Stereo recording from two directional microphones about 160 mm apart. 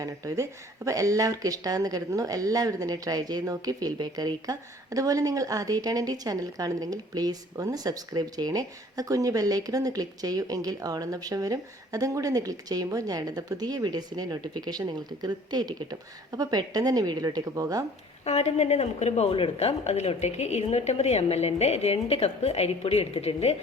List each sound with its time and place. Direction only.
0.0 s speech: 20° right (ahead or behind)
18.3 s speech: 45° left (ahead or behind)